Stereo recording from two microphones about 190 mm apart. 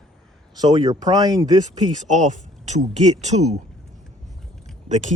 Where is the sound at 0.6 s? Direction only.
20° right (ahead or behind).